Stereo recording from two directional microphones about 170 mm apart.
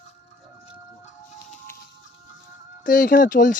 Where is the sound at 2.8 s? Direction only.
55° left (ahead or behind).